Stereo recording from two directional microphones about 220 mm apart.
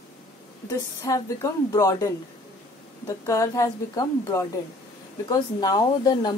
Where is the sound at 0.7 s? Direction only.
15° left (ahead or behind).